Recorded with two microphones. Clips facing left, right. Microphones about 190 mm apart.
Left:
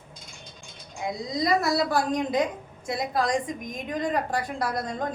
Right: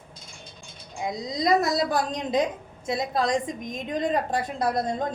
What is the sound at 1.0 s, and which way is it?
A woman's voice, 20° right (ahead or behind).